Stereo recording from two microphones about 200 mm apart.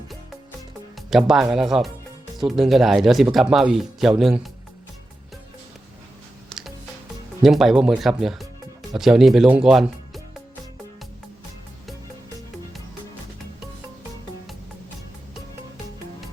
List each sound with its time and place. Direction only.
0.9 s speech: centre (ahead or behind)
6.5 s music: centre (ahead or behind)
7.4 s speech: centre (ahead or behind)